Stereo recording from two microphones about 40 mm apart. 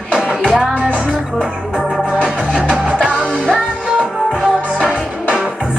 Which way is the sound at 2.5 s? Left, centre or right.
Right.